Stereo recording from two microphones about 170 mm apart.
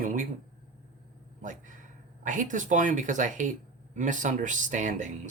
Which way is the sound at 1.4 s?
50° right (ahead or behind).